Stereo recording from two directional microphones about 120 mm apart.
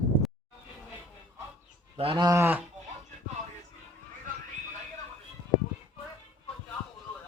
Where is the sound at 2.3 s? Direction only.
20° right (ahead or behind).